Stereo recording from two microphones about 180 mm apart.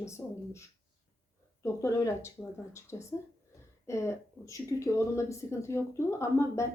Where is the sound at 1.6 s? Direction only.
15° left (ahead or behind).